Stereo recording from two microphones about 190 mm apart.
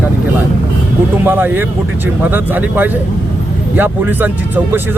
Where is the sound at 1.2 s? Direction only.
10° right (ahead or behind).